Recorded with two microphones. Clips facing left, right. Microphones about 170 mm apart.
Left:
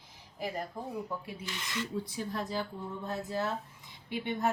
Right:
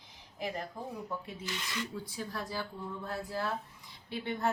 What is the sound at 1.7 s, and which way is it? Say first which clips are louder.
Speech: left 3 dB; 20° left (ahead or behind).